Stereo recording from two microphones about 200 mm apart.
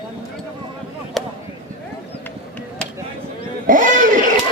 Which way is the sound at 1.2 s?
Centre (ahead or behind).